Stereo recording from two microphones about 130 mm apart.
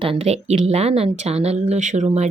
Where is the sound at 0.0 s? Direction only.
50° right (ahead or behind).